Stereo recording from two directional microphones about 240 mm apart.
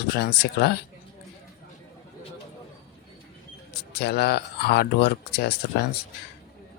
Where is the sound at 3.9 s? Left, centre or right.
Left.